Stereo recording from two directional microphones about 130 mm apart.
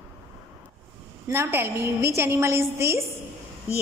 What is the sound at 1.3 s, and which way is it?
A woman's voice, 15° right (ahead or behind).